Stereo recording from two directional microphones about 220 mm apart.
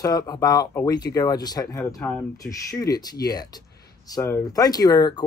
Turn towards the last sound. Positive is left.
turn(degrees=15)  # may be behind; listen again after turning